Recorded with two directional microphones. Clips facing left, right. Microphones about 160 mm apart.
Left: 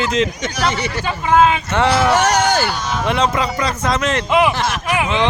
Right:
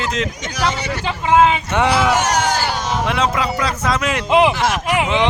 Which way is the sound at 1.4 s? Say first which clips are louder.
Left 1 dB; 15° right (ahead or behind).